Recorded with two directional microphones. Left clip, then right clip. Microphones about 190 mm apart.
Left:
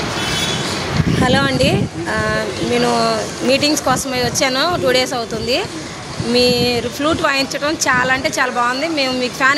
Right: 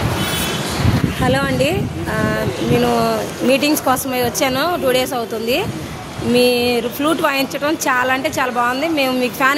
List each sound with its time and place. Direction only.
1.2 s a woman's voice: 10° right (ahead or behind)